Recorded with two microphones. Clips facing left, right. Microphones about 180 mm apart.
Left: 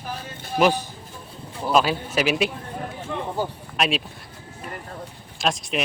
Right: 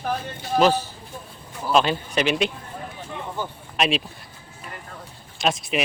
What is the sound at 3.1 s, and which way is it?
Speech, 65° left (ahead or behind).